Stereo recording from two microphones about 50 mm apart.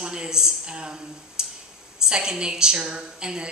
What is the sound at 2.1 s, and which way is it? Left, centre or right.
Speech, centre.